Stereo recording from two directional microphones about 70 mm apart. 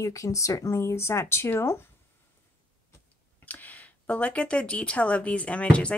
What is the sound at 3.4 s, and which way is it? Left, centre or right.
Speech, left.